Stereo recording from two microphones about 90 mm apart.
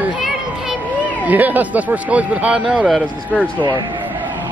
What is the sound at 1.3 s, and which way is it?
Speech, 20° right (ahead or behind).